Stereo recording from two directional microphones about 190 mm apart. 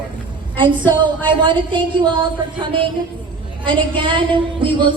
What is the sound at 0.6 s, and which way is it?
A woman's voice, 25° right (ahead or behind).